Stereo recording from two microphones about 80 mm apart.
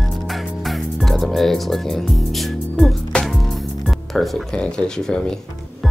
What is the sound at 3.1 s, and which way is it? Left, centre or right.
Music, centre.